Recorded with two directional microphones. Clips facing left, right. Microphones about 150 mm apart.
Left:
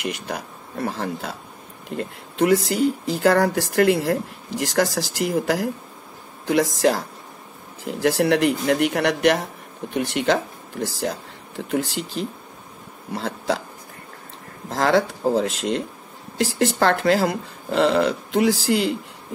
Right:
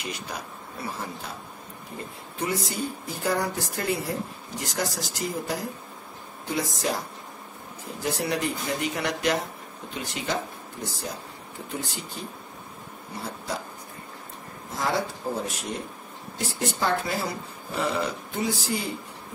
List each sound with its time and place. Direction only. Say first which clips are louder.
0.0 s speech: left 6 dB; 65° left (ahead or behind); by 13.6 s 90° left
14.7 s speech: left 8 dB; 90° left